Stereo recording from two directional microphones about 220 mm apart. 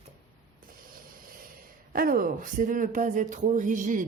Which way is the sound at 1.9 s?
40° right (ahead or behind).